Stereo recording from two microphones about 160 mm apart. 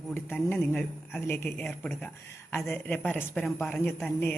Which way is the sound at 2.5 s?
15° left (ahead or behind).